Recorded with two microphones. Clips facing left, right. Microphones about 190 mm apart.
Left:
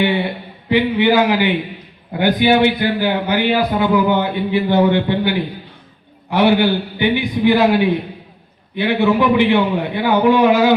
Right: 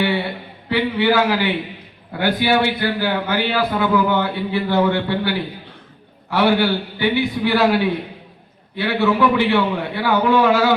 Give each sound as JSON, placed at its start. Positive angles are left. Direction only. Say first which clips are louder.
{"t": 0.7, "sound": "a man's voice", "louder": "left 3 dB", "side_deg": 20}